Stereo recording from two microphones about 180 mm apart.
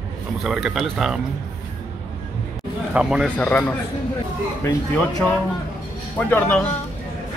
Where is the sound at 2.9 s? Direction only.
5° right (ahead or behind).